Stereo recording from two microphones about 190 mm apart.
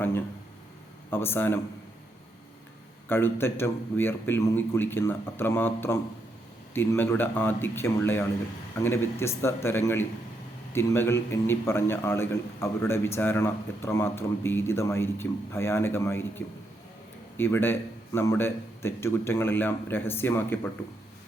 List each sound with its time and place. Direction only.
1.1 s a man's voice: 10° left (ahead or behind)
3.1 s a man's voice: 10° left (ahead or behind)